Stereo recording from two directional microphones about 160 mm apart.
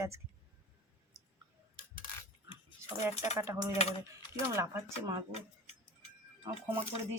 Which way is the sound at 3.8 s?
40° left (ahead or behind).